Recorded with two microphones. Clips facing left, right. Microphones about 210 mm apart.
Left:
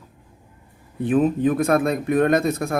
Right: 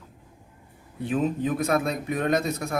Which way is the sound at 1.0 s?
55° left (ahead or behind).